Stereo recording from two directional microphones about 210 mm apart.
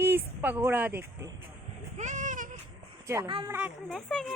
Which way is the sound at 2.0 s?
35° right (ahead or behind).